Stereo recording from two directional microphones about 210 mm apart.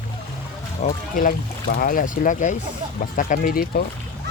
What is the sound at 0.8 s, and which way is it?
Speech, 40° left (ahead or behind).